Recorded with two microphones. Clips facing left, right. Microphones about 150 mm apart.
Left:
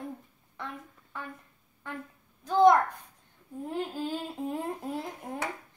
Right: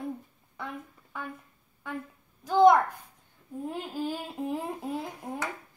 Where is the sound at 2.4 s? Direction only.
10° right (ahead or behind).